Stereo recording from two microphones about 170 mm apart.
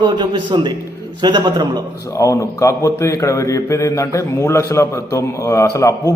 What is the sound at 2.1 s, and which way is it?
A man's voice, 20° left (ahead or behind).